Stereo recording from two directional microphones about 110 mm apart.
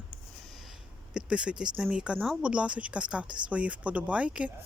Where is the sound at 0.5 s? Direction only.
Centre (ahead or behind).